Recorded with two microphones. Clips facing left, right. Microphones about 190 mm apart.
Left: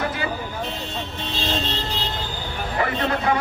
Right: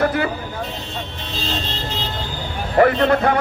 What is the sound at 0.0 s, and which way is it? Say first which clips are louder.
Vehicle: right 7 dB; 60° right (ahead or behind).